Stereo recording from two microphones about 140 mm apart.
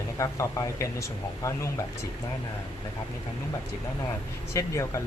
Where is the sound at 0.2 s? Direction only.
20° left (ahead or behind).